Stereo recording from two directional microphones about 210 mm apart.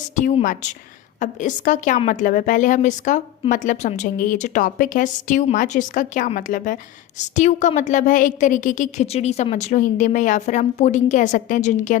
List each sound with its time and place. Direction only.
0.2 s a woman's voice: 35° left (ahead or behind)